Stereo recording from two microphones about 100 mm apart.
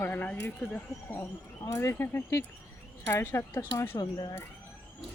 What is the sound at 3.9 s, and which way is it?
Speech, 45° left (ahead or behind).